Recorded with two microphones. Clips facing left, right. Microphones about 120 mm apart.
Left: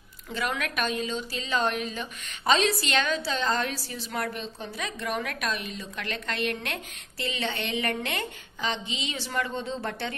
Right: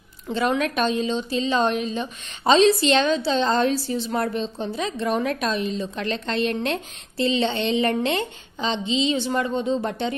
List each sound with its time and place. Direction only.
0.3 s a woman's voice: 25° right (ahead or behind)